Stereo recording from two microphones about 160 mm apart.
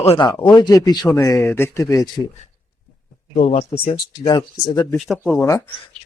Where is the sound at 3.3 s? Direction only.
40° left (ahead or behind).